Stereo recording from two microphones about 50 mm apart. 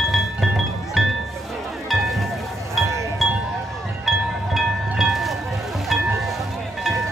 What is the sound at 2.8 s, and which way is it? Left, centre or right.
Music, right.